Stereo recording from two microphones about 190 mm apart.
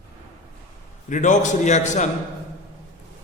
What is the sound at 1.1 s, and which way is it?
Speech, 40° left (ahead or behind).